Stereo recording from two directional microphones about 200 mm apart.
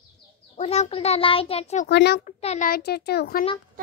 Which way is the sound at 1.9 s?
55° left (ahead or behind).